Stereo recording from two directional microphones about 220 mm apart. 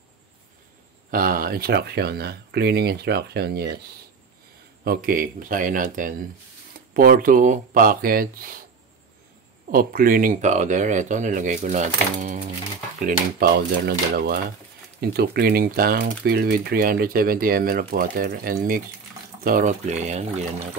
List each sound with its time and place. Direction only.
1.1 s speech: 40° right (ahead or behind)
4.8 s speech: 40° right (ahead or behind)
9.7 s speech: 40° right (ahead or behind)